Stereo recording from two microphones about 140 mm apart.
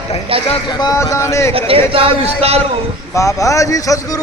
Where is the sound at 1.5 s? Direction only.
40° right (ahead or behind).